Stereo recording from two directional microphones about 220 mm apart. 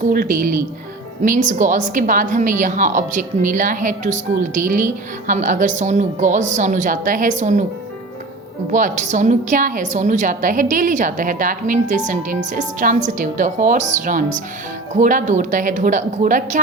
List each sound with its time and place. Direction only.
0.1 s a woman's voice: 40° right (ahead or behind)
8.7 s a woman's voice: 35° right (ahead or behind)